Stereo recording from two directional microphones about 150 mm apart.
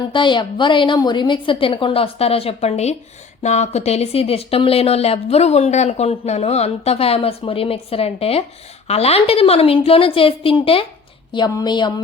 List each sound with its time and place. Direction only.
0.1 s a woman's voice: 30° left (ahead or behind)